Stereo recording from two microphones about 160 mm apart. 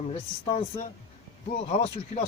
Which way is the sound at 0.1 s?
35° left (ahead or behind).